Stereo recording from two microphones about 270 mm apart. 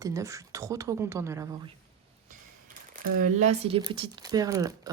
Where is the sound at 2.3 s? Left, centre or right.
Right.